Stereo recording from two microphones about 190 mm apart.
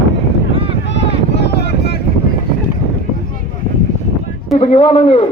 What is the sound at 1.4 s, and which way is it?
Wind noise, 60° left (ahead or behind).